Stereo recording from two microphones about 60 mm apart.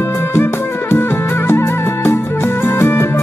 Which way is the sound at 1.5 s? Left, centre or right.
Left.